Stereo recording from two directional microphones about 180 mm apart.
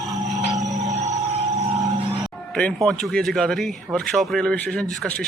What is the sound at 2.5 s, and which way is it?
Speech, 5° left (ahead or behind).